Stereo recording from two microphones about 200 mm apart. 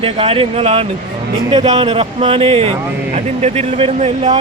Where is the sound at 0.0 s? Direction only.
30° right (ahead or behind).